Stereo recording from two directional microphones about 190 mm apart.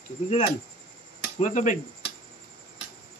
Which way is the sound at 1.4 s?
40° left (ahead or behind).